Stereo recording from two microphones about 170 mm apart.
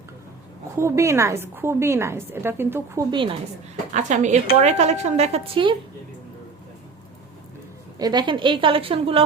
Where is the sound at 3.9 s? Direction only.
45° right (ahead or behind).